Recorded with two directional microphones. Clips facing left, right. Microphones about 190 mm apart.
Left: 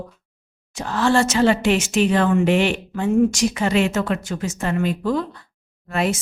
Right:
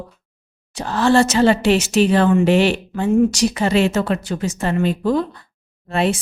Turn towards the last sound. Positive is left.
turn(degrees=-30)  # may be behind; listen again after turning